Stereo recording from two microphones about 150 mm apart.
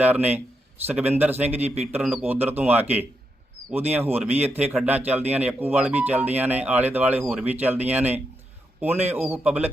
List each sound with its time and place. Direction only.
0.0 s speech: 10° right (ahead or behind)
1.6 s speech: 45° right (ahead or behind)
2.1 s speech: 15° right (ahead or behind)